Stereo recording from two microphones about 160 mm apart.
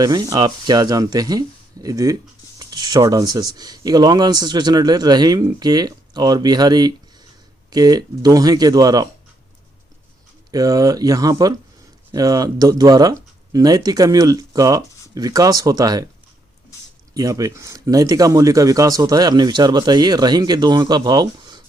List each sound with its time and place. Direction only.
0.0 s speech: 20° right (ahead or behind)
10.5 s speech: 20° right (ahead or behind)
17.2 s speech: 20° right (ahead or behind)